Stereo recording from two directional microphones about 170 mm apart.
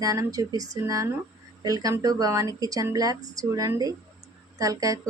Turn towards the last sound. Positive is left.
turn(degrees=-20)  # may be behind; listen again after turning